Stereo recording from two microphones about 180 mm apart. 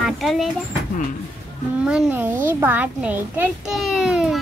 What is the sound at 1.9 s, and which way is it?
A child's voice, 10° right (ahead or behind).